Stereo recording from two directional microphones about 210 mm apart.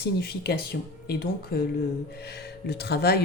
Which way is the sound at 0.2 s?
50° left (ahead or behind).